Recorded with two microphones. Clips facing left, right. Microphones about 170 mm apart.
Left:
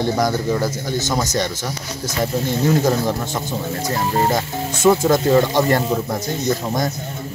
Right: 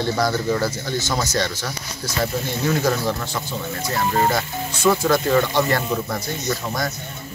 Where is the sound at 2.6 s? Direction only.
25° left (ahead or behind).